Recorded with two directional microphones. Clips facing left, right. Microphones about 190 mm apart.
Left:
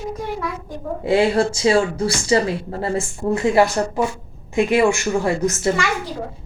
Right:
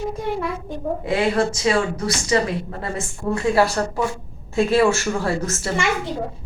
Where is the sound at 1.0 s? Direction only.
30° left (ahead or behind).